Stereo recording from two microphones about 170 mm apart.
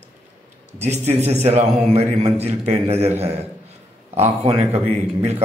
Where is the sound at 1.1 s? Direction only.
40° right (ahead or behind).